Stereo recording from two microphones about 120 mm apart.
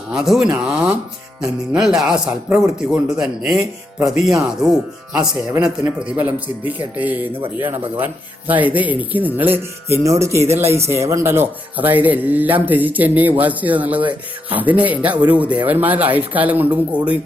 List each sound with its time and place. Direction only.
0.1 s a man's voice: 5° right (ahead or behind)
10.0 s speech: 25° right (ahead or behind)